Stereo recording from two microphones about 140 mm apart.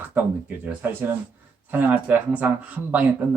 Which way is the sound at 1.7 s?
15° right (ahead or behind).